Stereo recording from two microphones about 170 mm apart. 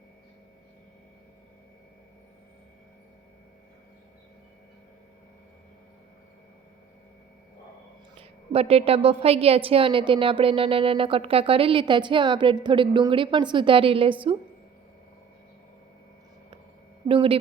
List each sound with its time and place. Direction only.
8.2 s a woman's voice: 35° right (ahead or behind)
17.1 s a woman's voice: 30° right (ahead or behind)